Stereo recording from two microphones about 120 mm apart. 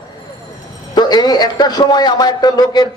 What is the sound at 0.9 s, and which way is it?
A man's voice, 35° left (ahead or behind).